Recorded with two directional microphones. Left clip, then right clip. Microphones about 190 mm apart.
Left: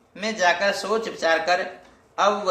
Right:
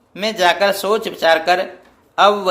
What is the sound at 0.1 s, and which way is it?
Speech, 50° right (ahead or behind).